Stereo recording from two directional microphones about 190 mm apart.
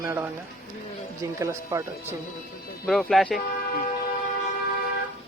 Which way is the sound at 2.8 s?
Centre (ahead or behind).